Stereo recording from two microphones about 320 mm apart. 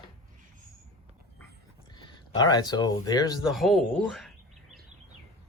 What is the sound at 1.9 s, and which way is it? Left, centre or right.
Speech, centre.